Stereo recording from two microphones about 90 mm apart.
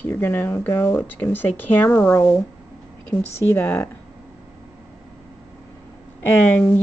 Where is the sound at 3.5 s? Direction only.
25° left (ahead or behind).